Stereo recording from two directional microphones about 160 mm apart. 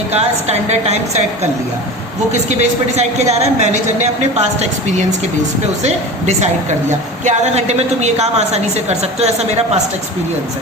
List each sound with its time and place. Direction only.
0.1 s a woman's voice: 45° right (ahead or behind)